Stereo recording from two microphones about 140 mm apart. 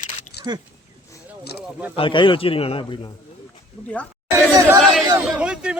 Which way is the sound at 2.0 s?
35° left (ahead or behind).